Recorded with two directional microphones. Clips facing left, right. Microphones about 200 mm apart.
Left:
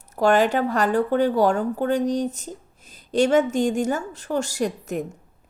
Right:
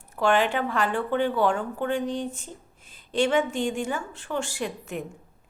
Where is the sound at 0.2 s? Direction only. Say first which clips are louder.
Left 4 dB; 40° left (ahead or behind).